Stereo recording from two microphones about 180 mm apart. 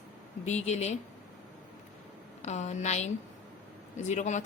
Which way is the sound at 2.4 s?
40° left (ahead or behind).